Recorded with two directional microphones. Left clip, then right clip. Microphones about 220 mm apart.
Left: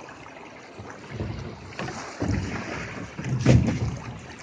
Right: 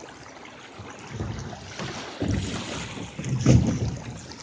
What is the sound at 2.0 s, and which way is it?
Boat, 35° right (ahead or behind).